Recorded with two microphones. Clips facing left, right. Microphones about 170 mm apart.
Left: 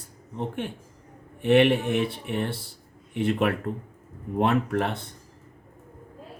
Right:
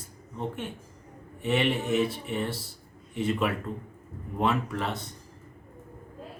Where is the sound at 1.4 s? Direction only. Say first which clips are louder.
Left 7 dB; 60° left (ahead or behind).